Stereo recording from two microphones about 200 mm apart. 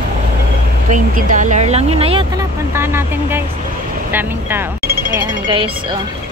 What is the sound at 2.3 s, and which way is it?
Speech, 10° right (ahead or behind).